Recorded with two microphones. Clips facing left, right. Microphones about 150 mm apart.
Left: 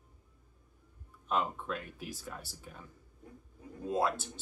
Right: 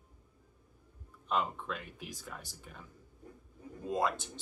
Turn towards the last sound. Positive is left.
turn(degrees=5)  # may be behind; listen again after turning